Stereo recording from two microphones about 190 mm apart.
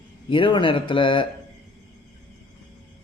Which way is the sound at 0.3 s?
25° left (ahead or behind).